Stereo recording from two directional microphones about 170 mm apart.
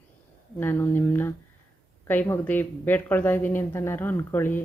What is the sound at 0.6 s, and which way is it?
Speech, 15° left (ahead or behind).